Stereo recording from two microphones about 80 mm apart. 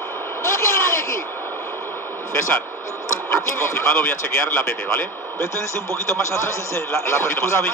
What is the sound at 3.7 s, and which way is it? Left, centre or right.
Speech, left.